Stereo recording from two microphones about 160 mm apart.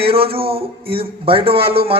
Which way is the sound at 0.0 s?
35° right (ahead or behind).